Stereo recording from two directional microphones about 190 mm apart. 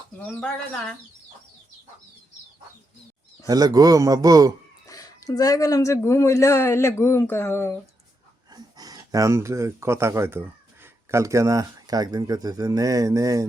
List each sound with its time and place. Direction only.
0.2 s speech: 5° left (ahead or behind)
3.4 s a man's voice: 20° right (ahead or behind)
4.9 s speech: 20° left (ahead or behind)
8.5 s speech: 20° right (ahead or behind)